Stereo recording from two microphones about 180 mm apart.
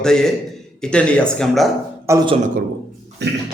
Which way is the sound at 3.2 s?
65° right (ahead or behind).